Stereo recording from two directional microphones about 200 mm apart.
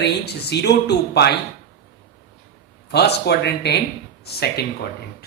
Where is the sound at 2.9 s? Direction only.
55° left (ahead or behind).